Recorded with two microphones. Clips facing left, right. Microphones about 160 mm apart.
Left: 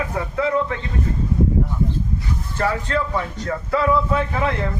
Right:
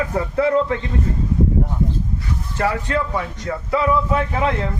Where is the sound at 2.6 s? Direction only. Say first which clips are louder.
Right 1 dB; 15° right (ahead or behind).